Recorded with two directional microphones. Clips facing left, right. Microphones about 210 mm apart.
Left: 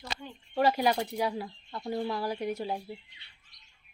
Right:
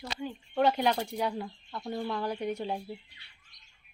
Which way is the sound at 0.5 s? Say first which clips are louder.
Left 1 dB; 5° left (ahead or behind).